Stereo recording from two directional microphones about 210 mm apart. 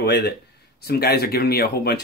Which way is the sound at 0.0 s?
50° left (ahead or behind).